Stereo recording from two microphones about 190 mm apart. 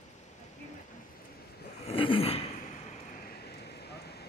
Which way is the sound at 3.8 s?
60° left (ahead or behind).